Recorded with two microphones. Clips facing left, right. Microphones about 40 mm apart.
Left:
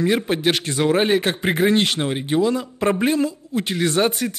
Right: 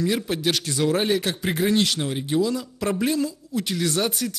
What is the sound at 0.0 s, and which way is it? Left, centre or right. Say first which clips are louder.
Speech: left 4 dB; left.